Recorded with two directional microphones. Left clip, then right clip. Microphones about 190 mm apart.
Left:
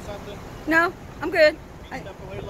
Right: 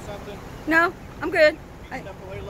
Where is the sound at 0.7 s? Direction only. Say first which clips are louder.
Right 1 dB; 5° right (ahead or behind).